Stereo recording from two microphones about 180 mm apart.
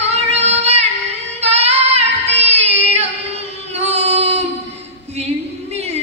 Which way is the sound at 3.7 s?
35° right (ahead or behind).